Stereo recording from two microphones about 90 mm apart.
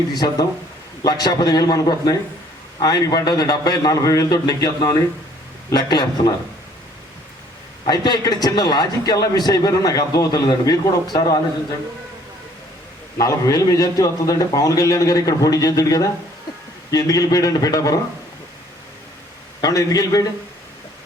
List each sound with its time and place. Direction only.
0.1 s a man's voice: 50° left (ahead or behind)
7.9 s a man's voice: 50° left (ahead or behind)
13.1 s a man's voice: 40° left (ahead or behind)
19.6 s a man's voice: 40° left (ahead or behind)